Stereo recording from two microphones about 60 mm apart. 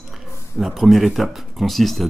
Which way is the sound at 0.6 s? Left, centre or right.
Centre.